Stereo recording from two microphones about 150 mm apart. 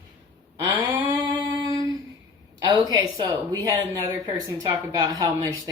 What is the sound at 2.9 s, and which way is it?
A woman's voice, 30° right (ahead or behind).